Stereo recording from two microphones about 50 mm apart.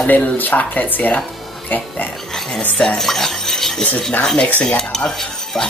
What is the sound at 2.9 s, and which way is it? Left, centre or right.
Stir, centre.